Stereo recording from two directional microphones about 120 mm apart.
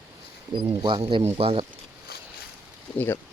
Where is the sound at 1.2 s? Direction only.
60° right (ahead or behind).